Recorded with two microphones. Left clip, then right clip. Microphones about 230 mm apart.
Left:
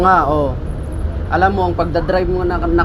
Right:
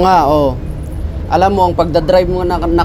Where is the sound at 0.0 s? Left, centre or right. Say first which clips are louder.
Right 3 dB; right.